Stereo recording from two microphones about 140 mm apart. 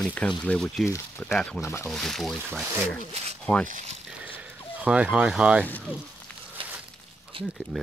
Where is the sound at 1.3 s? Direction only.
5° left (ahead or behind).